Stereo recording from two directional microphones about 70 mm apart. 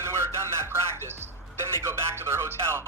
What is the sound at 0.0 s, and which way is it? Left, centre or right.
Music, right.